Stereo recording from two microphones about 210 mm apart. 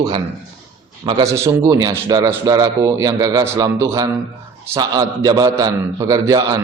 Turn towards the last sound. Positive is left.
turn(degrees=-15)  # may be behind; listen again after turning